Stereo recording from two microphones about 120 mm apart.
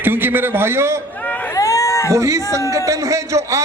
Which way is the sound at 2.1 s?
25° right (ahead or behind).